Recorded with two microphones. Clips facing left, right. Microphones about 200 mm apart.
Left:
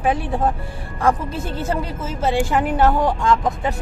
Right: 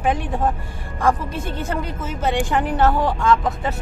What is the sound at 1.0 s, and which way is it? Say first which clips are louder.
Speech: left 1 dB; 10° left (ahead or behind).